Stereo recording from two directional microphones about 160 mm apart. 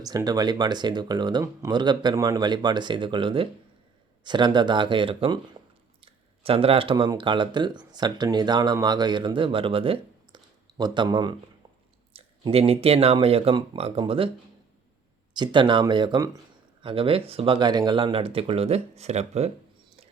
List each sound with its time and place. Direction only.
0.0 s speech: 25° right (ahead or behind)
6.4 s speech: 35° right (ahead or behind)
15.4 s speech: 30° right (ahead or behind)